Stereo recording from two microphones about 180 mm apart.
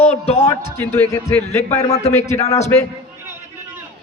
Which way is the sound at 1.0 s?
10° left (ahead or behind).